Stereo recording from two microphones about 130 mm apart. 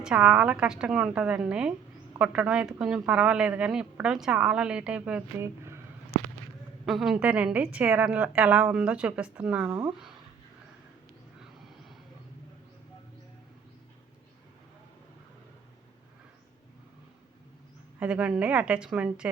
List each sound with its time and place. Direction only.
0.0 s a woman's voice: 10° right (ahead or behind)
5.4 s a sound: 20° right (ahead or behind)
6.8 s a woman's voice: centre (ahead or behind)
18.0 s a woman's voice: 10° right (ahead or behind)